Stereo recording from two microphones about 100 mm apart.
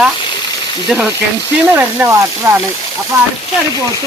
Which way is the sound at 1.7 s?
20° right (ahead or behind).